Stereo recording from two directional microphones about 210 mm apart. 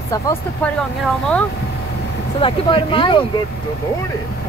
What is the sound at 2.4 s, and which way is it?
Speech, 25° left (ahead or behind).